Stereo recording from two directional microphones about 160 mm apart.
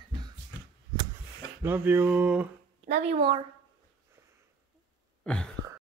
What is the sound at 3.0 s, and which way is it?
Speech, 35° right (ahead or behind).